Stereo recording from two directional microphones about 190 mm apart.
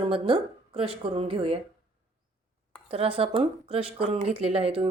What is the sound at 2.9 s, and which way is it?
A woman's voice, 30° right (ahead or behind).